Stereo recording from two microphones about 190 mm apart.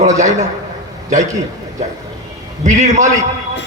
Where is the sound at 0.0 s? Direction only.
40° right (ahead or behind).